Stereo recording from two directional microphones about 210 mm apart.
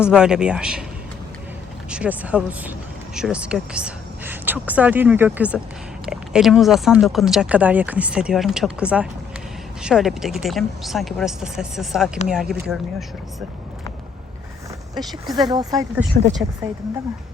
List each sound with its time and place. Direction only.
0.0 s speech: 5° right (ahead or behind)
1.9 s speech: 5° right (ahead or behind)
15.3 s speech: 20° right (ahead or behind)
16.1 s speech: 45° right (ahead or behind)